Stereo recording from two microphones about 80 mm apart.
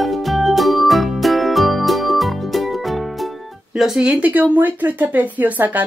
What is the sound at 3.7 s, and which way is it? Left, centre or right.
Speech, centre.